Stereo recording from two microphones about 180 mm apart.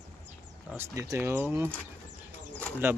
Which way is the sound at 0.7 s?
15° right (ahead or behind).